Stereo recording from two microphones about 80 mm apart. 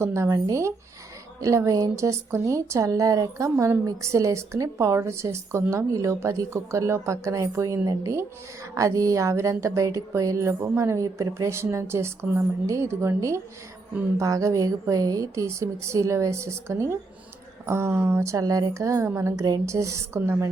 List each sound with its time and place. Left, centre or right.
0.0 s a woman's voice: right
18.3 s a woman's voice: right